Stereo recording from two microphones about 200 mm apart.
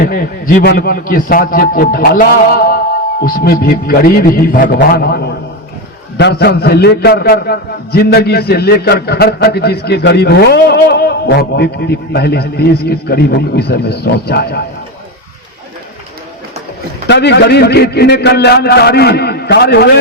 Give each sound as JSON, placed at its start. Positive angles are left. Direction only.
{"t": 0.0, "sound": "a man's voice", "side_deg": 45}
{"t": 17.1, "sound": "a man's voice", "side_deg": 60}